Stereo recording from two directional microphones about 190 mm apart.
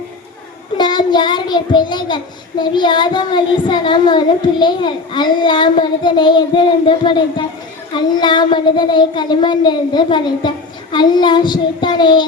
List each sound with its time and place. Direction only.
0.8 s child singing: 25° left (ahead or behind)